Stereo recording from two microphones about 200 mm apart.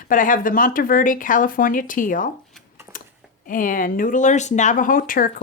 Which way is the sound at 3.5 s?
45° left (ahead or behind).